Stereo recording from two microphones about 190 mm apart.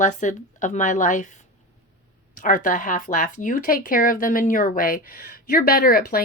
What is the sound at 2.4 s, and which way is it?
Speech, 45° left (ahead or behind).